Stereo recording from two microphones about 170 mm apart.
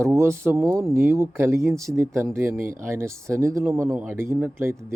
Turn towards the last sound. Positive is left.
turn(degrees=-15)  # may be behind; listen again after turning